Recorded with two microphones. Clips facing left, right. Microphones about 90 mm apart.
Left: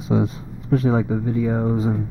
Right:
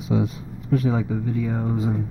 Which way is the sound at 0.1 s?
35° left (ahead or behind).